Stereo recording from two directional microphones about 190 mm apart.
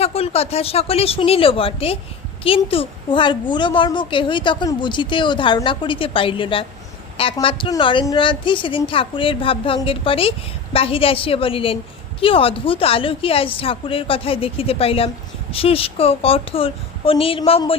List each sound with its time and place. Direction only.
0.0 s a woman's voice: 30° left (ahead or behind)